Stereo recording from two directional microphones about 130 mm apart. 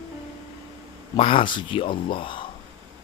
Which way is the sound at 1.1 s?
40° left (ahead or behind).